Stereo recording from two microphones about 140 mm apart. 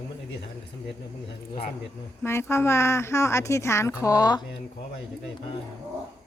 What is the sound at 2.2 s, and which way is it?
A woman's voice, 20° left (ahead or behind).